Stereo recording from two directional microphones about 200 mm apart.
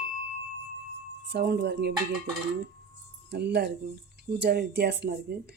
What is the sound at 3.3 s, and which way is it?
Speech, 55° right (ahead or behind).